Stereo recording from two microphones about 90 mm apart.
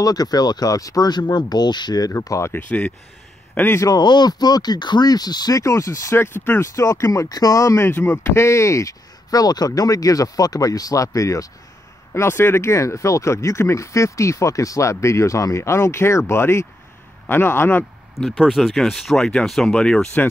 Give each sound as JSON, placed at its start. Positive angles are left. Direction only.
{"t": 0.0, "sound": "speech", "side_deg": 45}
{"t": 3.5, "sound": "a man's voice", "side_deg": 20}
{"t": 3.8, "sound": "speech", "side_deg": 50}
{"t": 12.1, "sound": "speech", "side_deg": 25}
{"t": 18.1, "sound": "speech", "side_deg": -5}